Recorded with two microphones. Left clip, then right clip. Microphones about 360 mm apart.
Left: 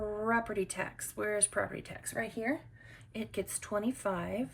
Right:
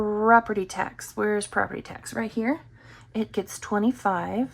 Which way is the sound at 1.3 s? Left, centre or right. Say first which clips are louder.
Right 8 dB; centre.